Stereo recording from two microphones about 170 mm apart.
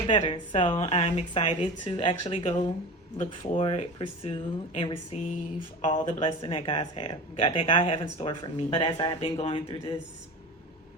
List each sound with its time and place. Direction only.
0.1 s a woman's voice: 35° left (ahead or behind)